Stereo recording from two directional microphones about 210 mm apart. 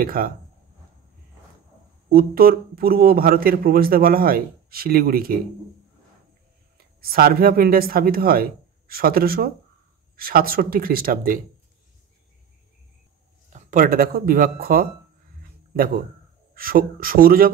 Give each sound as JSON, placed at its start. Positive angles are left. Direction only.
{"t": 0.0, "sound": "speech", "side_deg": -45}
{"t": 2.0, "sound": "speech", "side_deg": -45}
{"t": 6.8, "sound": "speech", "side_deg": -45}
{"t": 13.5, "sound": "speech", "side_deg": -35}
{"t": 15.4, "sound": "a sound", "side_deg": -45}
{"t": 16.5, "sound": "speech", "side_deg": -45}